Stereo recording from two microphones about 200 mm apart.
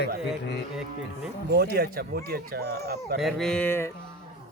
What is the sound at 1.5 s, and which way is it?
Speech, 50° right (ahead or behind).